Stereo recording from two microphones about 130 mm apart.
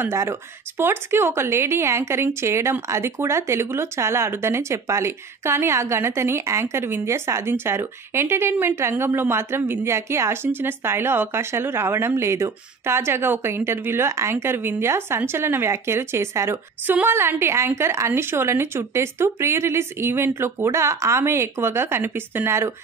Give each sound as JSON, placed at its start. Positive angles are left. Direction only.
{"t": 0.0, "sound": "speech", "side_deg": -20}